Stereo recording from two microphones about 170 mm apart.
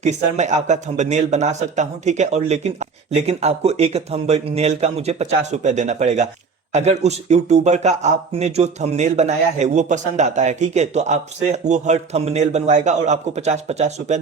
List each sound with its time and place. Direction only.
0.0 s speech: 45° right (ahead or behind)